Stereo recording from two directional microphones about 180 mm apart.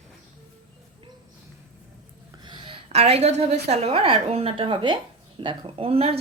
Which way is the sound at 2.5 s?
30° right (ahead or behind).